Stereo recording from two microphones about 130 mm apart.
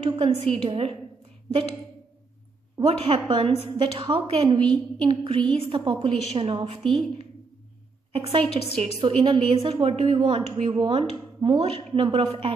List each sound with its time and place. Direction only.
0.0 s a woman's voice: 45° right (ahead or behind)
2.9 s a woman's voice: 40° right (ahead or behind)
6.8 s a woman's voice: centre (ahead or behind)
8.1 s a woman's voice: 45° right (ahead or behind)
8.5 s a woman's voice: 50° left (ahead or behind)
9.0 s a woman's voice: 40° right (ahead or behind)